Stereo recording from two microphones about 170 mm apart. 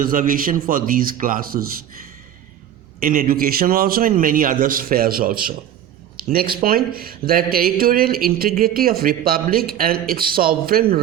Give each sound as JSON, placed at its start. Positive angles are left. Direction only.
{"t": 0.0, "sound": "a man's voice", "side_deg": -55}
{"t": 3.0, "sound": "a man's voice", "side_deg": -55}